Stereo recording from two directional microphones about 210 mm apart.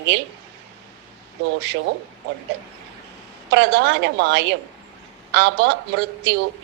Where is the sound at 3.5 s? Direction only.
55° right (ahead or behind).